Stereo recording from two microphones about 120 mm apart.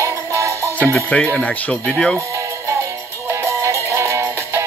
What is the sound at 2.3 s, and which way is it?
Music, 25° right (ahead or behind).